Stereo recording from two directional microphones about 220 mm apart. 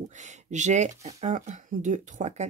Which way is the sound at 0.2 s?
35° right (ahead or behind).